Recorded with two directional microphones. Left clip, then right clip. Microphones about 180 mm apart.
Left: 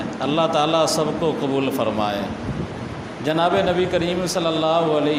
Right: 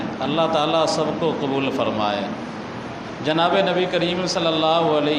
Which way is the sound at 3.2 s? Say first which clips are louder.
Even; 30° left (ahead or behind).